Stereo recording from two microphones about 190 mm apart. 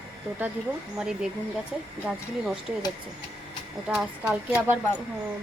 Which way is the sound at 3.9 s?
5° right (ahead or behind).